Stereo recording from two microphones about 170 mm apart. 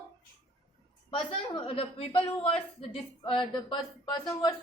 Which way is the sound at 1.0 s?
30° left (ahead or behind).